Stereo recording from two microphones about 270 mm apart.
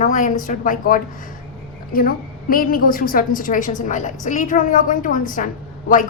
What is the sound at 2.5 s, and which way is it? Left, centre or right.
A woman's voice, left.